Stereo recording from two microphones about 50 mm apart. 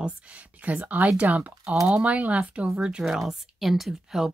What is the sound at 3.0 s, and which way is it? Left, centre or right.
Speech, centre.